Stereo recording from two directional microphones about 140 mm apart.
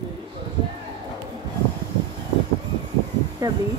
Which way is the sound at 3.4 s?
25° right (ahead or behind).